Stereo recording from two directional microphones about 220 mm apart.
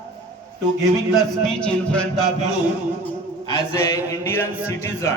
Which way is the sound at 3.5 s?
15° left (ahead or behind).